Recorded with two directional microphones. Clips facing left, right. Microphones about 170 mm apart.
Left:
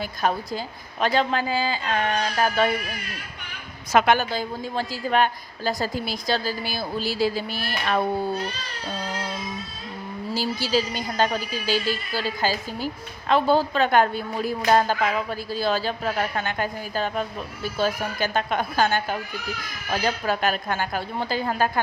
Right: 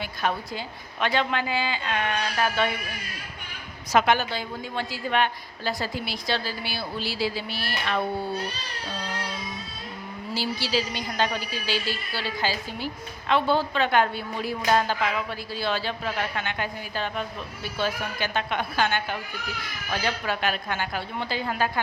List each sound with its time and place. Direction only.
0.0 s speech: 40° left (ahead or behind)
3.9 s a woman's voice: 50° left (ahead or behind)
10.3 s a woman's voice: 45° left (ahead or behind)